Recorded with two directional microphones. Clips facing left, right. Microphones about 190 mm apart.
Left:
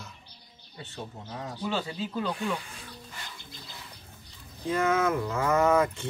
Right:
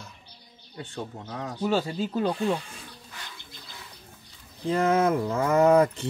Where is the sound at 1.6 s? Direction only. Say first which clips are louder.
Right 6 dB; 45° right (ahead or behind).